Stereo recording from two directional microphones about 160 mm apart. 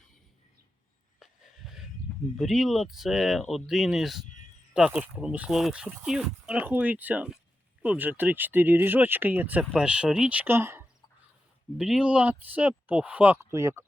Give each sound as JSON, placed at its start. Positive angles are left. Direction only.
{"t": 1.2, "sound": "a sound", "side_deg": 0}
{"t": 2.4, "sound": "speech", "side_deg": 0}
{"t": 11.8, "sound": "speech", "side_deg": -5}